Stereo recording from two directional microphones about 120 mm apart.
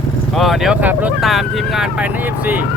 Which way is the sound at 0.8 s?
15° right (ahead or behind).